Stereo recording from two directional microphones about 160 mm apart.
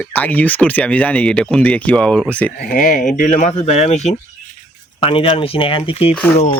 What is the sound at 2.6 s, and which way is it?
Speech, 60° left (ahead or behind).